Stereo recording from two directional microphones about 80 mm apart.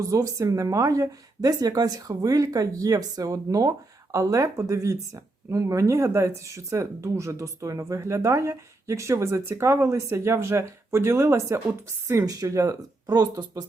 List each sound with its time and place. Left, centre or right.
0.0 s speech: right
12.2 s speech: right